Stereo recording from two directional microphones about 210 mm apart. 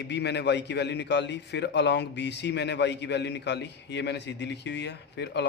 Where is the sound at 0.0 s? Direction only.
55° left (ahead or behind).